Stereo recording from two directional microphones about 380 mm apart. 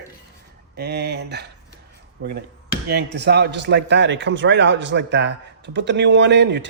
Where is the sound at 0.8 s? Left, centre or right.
Right.